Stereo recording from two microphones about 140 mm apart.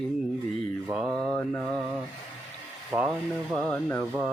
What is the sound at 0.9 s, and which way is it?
Mantra, 5° right (ahead or behind).